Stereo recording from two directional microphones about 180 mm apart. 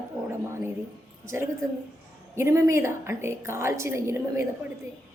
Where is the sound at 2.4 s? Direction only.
15° right (ahead or behind).